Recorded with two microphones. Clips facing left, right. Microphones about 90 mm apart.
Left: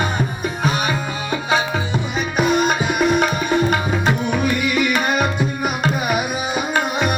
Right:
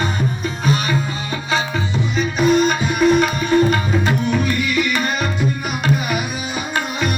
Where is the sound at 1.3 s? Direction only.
15° left (ahead or behind).